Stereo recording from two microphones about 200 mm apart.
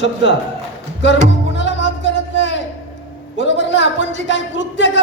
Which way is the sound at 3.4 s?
65° left (ahead or behind).